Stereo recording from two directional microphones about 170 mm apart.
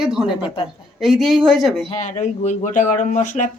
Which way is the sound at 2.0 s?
45° left (ahead or behind).